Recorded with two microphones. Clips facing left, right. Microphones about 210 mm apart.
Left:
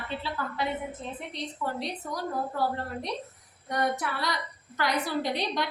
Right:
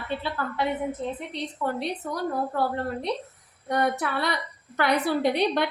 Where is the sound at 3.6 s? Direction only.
60° right (ahead or behind).